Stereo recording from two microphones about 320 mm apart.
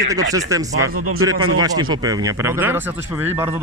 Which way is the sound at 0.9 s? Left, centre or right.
Right.